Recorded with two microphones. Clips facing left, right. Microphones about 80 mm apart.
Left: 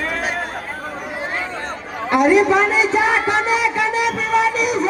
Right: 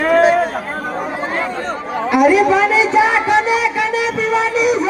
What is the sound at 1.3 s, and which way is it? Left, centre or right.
Chatter, right.